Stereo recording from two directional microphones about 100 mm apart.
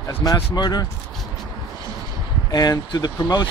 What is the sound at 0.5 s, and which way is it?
Speech, 45° left (ahead or behind).